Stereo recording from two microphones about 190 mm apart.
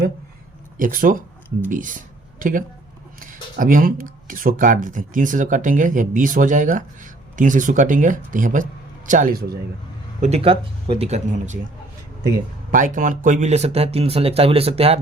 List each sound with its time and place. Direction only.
0.8 s speech: 45° right (ahead or behind)
10.2 s speech: 35° right (ahead or behind)
12.7 s speech: 45° right (ahead or behind)